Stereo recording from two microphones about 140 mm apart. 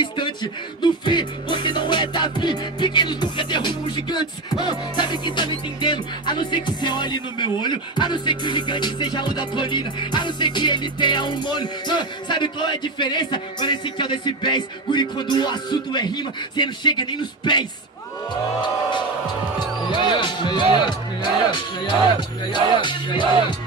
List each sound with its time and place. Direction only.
0.0 s speech: 35° left (ahead or behind)
1.0 s music: 35° left (ahead or behind)